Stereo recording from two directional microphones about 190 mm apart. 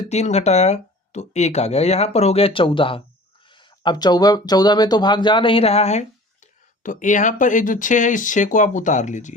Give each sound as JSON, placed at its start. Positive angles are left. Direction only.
{"t": 0.0, "sound": "speech", "side_deg": 35}